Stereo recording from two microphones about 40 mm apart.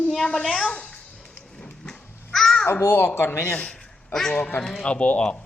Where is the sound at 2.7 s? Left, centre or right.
Left.